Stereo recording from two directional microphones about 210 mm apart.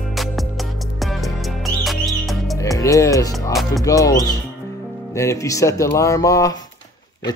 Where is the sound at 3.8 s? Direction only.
15° left (ahead or behind).